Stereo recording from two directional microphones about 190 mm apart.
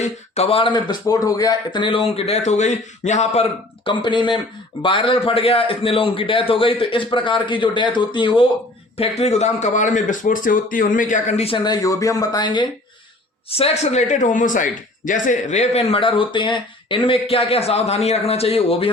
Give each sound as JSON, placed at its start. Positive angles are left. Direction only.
{"t": 0.0, "sound": "a man's voice", "side_deg": 30}
{"t": 3.8, "sound": "a man's voice", "side_deg": 25}
{"t": 13.5, "sound": "a man's voice", "side_deg": 35}